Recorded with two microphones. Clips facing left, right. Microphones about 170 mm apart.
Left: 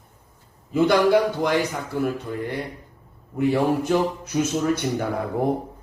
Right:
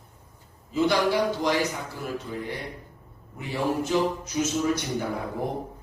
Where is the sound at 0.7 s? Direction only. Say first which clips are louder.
Left 5 dB; 55° left (ahead or behind).